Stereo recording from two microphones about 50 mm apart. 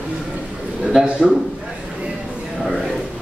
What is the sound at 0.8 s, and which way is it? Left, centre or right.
Speech, centre.